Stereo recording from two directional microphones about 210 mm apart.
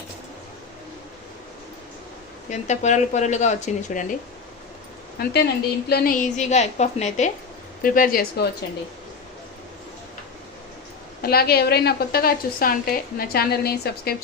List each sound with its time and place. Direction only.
2.5 s speech: 35° left (ahead or behind)
5.2 s a woman's voice: 50° left (ahead or behind)
11.2 s a woman's voice: 45° left (ahead or behind)